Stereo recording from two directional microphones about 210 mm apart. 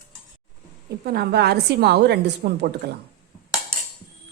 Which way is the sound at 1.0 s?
50° right (ahead or behind).